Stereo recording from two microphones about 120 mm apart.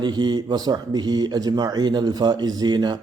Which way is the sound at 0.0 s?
35° right (ahead or behind).